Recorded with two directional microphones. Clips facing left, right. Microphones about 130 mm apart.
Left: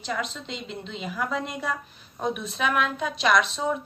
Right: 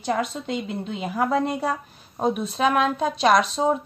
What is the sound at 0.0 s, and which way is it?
A woman's voice, 50° right (ahead or behind).